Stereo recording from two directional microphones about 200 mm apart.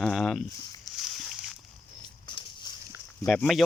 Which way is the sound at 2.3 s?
25° left (ahead or behind).